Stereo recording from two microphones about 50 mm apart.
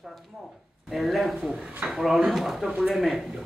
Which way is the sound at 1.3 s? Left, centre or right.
Centre.